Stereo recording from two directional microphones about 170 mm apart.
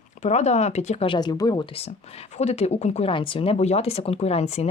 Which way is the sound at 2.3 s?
40° left (ahead or behind).